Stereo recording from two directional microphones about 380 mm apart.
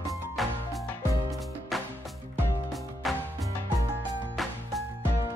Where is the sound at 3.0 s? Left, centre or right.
Centre.